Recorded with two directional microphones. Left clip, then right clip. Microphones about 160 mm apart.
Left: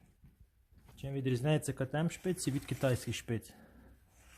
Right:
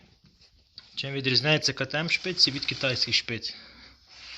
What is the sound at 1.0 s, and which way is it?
Speech, 15° left (ahead or behind).